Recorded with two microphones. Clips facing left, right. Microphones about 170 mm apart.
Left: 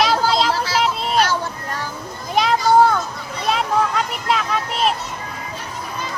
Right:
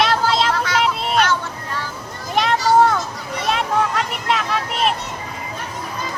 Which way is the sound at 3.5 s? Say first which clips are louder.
Left 1 dB; centre (ahead or behind).